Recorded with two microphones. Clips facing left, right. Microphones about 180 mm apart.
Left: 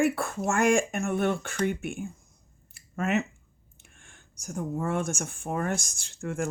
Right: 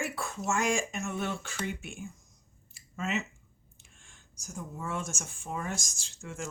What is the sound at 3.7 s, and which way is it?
Speech, 60° left (ahead or behind).